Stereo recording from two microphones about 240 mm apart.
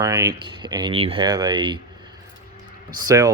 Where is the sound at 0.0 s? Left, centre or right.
Centre.